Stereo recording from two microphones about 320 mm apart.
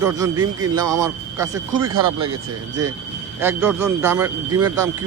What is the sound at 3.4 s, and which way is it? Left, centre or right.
A man's voice, centre.